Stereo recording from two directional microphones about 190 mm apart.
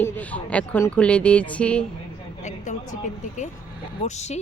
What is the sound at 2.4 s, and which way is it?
A woman's voice, 40° left (ahead or behind).